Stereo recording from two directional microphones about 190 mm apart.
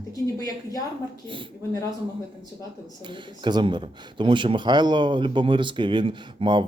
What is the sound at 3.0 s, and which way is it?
Speech, 25° right (ahead or behind).